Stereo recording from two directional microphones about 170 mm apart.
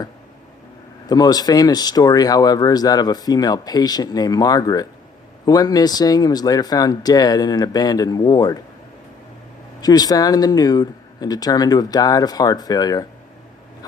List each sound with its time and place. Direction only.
1.0 s speech: 25° left (ahead or behind)
9.8 s speech: 20° left (ahead or behind)